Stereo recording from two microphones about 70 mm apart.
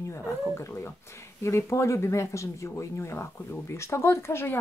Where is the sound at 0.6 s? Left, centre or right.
Left.